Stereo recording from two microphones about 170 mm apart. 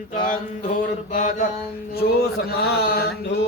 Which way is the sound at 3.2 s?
80° left.